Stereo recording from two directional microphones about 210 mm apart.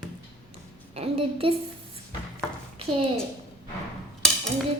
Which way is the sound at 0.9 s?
30° right (ahead or behind).